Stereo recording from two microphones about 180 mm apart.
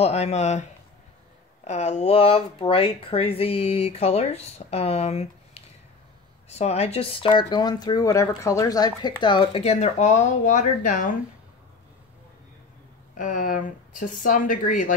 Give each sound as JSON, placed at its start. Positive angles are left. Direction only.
{"t": 0.0, "sound": "speech", "side_deg": 35}
{"t": 13.2, "sound": "speech", "side_deg": 45}